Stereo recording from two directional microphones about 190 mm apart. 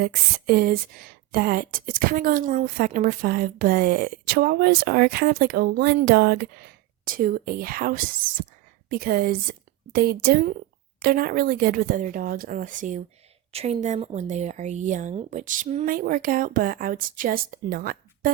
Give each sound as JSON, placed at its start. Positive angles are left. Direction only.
{"t": 0.0, "sound": "a woman's voice", "side_deg": -55}
{"t": 13.5, "sound": "speech", "side_deg": -30}